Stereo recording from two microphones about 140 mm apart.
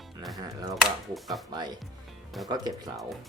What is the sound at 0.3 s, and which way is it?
Speech, 30° right (ahead or behind).